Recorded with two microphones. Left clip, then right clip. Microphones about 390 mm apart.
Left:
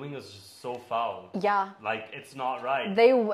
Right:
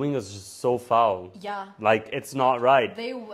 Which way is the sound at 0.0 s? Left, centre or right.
Right.